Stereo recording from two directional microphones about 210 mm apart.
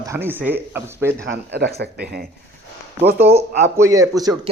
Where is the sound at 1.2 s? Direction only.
50° right (ahead or behind).